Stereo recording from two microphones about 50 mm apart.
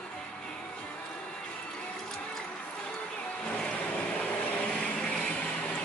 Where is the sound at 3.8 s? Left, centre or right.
Left.